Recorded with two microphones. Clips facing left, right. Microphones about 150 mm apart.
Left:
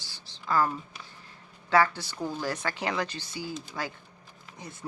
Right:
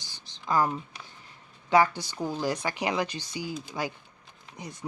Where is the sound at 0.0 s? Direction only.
15° right (ahead or behind).